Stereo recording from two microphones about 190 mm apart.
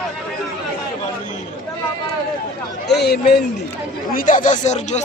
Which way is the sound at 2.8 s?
60° left (ahead or behind).